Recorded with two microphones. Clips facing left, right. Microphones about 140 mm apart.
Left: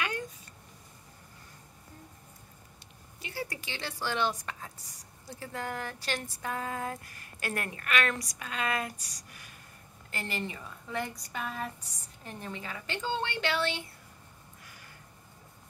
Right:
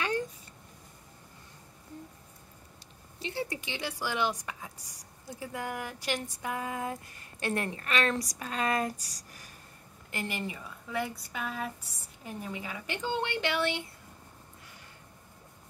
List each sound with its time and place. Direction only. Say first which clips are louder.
3.2 s speech: right 4 dB; 25° right (ahead or behind)
10.1 s speech: right 1 dB; 15° right (ahead or behind)